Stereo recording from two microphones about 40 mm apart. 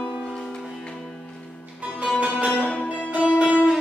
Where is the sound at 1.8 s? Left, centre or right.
Right.